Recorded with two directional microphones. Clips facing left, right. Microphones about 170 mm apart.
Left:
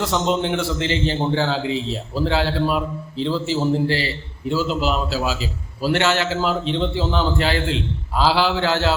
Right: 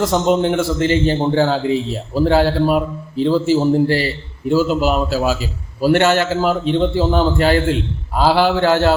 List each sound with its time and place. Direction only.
0.0 s a man's voice: 45° right (ahead or behind)